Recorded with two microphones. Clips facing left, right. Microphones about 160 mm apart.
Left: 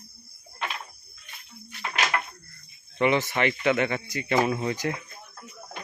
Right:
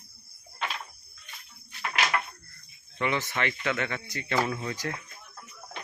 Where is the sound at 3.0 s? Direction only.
20° left (ahead or behind).